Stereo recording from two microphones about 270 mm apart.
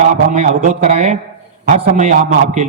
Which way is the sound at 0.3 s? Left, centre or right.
Right.